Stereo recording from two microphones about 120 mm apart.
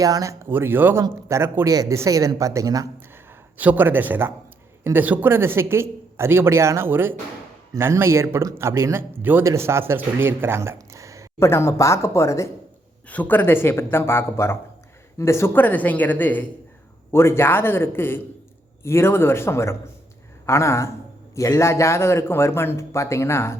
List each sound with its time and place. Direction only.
0.0 s a man's voice: 30° right (ahead or behind)
3.6 s a man's voice: 15° right (ahead or behind)
11.3 s a man's voice: 20° left (ahead or behind)
13.1 s a man's voice: 15° left (ahead or behind)